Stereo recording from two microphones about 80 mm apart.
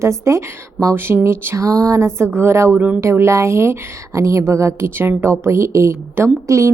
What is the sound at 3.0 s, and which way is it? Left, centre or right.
A woman's voice, right.